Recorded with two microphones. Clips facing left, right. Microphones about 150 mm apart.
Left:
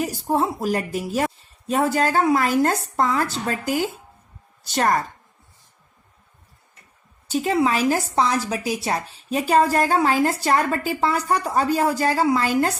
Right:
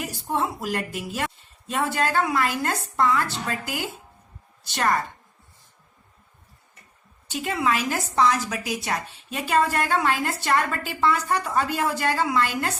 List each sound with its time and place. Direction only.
0.0 s a woman's voice: 35° left (ahead or behind)
7.3 s speech: 35° left (ahead or behind)